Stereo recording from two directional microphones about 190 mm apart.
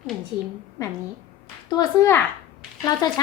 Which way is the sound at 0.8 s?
20° left (ahead or behind).